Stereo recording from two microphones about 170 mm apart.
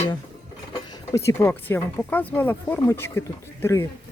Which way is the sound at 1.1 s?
15° left (ahead or behind).